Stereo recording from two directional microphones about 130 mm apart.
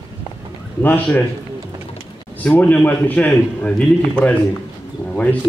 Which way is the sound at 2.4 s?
10° left (ahead or behind).